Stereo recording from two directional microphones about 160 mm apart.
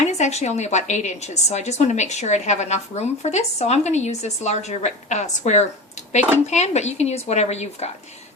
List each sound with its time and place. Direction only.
0.0 s a woman's voice: 45° left (ahead or behind)